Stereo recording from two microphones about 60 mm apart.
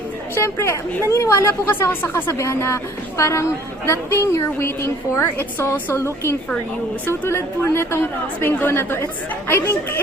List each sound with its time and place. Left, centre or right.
0.4 s a woman's voice: left
2.4 s a woman's voice: left
7.1 s a woman's voice: left